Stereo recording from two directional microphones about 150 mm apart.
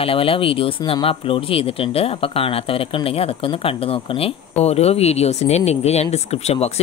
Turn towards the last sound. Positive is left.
turn(degrees=45)  # may be behind; listen again after turning